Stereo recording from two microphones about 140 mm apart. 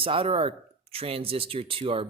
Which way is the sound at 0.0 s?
40° right (ahead or behind).